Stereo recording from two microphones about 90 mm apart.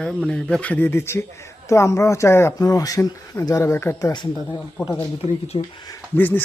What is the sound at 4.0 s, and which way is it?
Speech, 50° left (ahead or behind).